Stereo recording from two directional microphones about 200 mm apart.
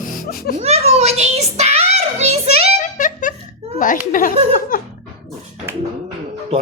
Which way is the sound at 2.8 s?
40° left (ahead or behind).